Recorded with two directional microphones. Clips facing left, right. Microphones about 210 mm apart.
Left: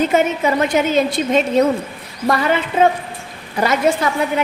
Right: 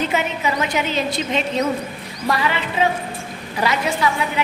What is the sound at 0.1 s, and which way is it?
A woman's voice, 50° left (ahead or behind).